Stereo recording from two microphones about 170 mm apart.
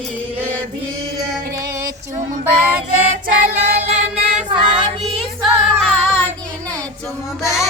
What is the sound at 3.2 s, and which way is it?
Child singing, 55° right (ahead or behind).